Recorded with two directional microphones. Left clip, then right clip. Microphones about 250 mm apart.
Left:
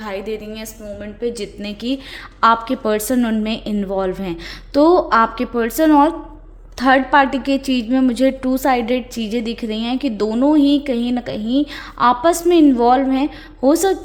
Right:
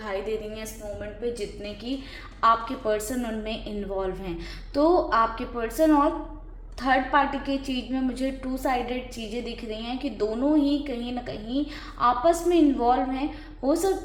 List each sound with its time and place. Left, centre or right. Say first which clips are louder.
0.0 s a woman's voice: left 4 dB; left